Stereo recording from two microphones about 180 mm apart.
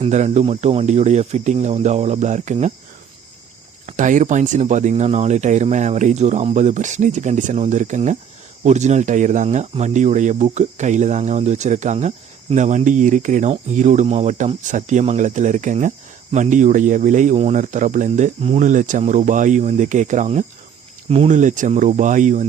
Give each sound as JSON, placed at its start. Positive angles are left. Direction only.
{"t": 0.0, "sound": "speech", "side_deg": -40}
{"t": 3.8, "sound": "speech", "side_deg": -45}